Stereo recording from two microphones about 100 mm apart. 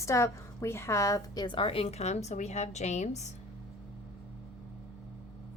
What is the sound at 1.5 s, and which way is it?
A woman's voice, 65° left (ahead or behind).